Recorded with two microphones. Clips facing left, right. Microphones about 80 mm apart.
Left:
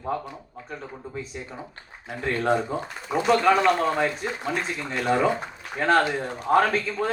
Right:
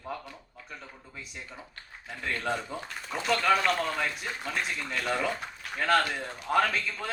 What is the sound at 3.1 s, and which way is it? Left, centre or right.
Speech, centre.